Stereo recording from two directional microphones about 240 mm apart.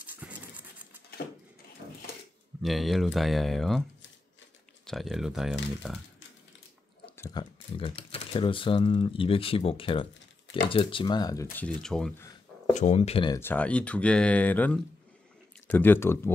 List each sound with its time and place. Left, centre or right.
0.0 s a sound: centre
2.6 s speech: centre
4.8 s speech: centre
7.2 s speech: centre
11.5 s speech: centre
12.7 s speech: left; by 16.3 s centre